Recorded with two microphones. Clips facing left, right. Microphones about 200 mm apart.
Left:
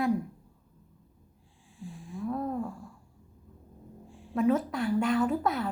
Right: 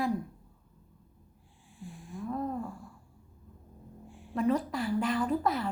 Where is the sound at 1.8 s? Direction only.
35° left (ahead or behind).